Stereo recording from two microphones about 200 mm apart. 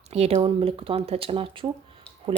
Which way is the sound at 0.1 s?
30° right (ahead or behind).